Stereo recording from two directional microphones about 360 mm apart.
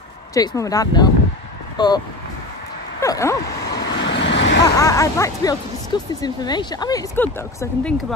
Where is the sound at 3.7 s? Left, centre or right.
Left.